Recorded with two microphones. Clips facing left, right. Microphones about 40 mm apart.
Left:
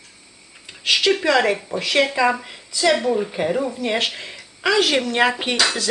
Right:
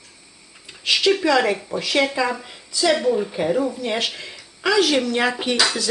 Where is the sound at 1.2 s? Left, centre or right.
Left.